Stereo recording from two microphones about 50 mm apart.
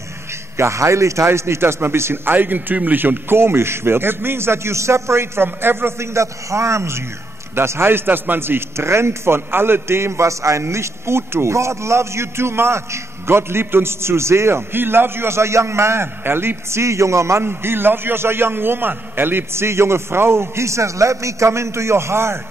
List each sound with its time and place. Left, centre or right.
0.6 s a man's voice: right
2.3 s a man's voice: right
7.5 s a man's voice: right
10.6 s a man's voice: right
14.7 s a man's voice: right
16.8 s a man's voice: right
17.4 s a man's voice: right